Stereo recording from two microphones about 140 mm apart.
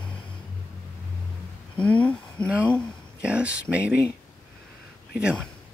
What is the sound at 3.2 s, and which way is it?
Speech, 10° right (ahead or behind).